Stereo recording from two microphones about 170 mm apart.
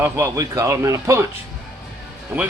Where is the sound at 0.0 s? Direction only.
15° right (ahead or behind).